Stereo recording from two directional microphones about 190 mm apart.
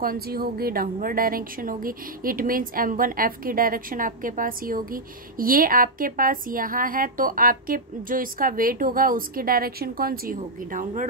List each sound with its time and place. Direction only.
0.0 s a woman's voice: 50° right (ahead or behind)